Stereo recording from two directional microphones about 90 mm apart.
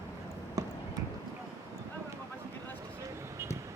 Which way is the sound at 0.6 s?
40° right (ahead or behind).